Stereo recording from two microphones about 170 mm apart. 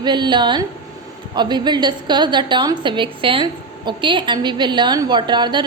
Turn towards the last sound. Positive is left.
turn(degrees=-25)  # may be behind; listen again after turning